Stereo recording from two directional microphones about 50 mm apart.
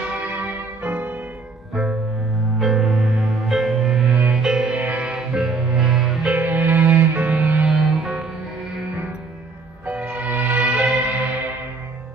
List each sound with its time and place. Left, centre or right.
0.3 s music: right
2.6 s music: centre
4.1 s music: right
4.4 s music: centre
4.7 s music: right
5.3 s music: centre
6.2 s music: right
9.8 s music: right